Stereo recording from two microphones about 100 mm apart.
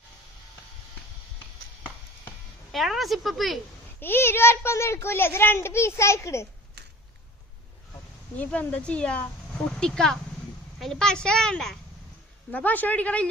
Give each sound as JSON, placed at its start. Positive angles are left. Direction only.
{"t": 2.7, "sound": "speech", "side_deg": 0}
{"t": 4.0, "sound": "a child's voice", "side_deg": 20}
{"t": 8.4, "sound": "a woman's voice", "side_deg": 15}